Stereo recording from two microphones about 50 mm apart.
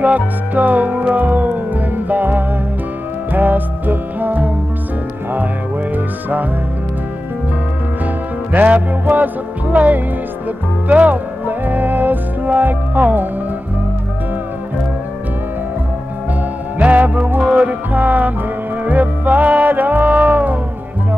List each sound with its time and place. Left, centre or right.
0.0 s music: right
8.5 s music: right
16.7 s music: right